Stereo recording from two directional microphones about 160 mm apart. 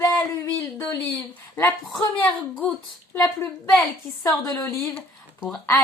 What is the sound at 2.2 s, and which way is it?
Speech, 10° left (ahead or behind).